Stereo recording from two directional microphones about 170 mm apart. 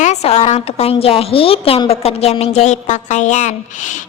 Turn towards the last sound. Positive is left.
turn(degrees=45)  # may be behind; listen again after turning